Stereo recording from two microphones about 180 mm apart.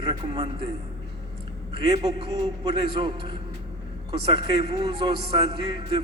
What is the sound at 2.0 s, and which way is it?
A man's voice, 30° right (ahead or behind).